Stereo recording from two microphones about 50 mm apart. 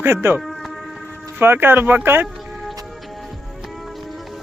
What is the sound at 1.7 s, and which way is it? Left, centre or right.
Speech, right.